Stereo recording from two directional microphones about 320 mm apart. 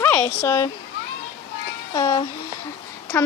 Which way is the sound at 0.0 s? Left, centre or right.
Centre.